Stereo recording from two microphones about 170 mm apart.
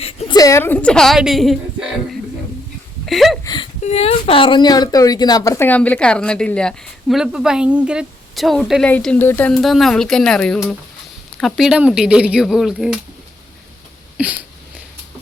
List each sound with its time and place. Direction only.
0.0 s a sound: 35° left (ahead or behind)
0.3 s speech: 20° left (ahead or behind); by 1.5 s centre (ahead or behind)
3.1 s speech: centre (ahead or behind)
3.4 s speech: 25° left (ahead or behind)
3.8 s speech: 35° left (ahead or behind); by 12.9 s centre (ahead or behind)
14.2 s a sound: 10° right (ahead or behind)